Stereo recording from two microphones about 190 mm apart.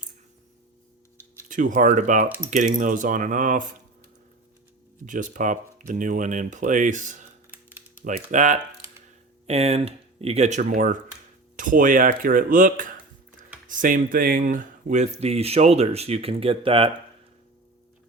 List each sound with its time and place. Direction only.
1.5 s speech: 45° right (ahead or behind)
5.0 s speech: 45° right (ahead or behind)